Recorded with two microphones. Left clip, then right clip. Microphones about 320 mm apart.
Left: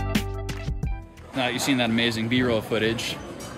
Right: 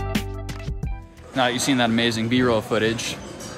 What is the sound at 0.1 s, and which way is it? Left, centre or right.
Music, centre.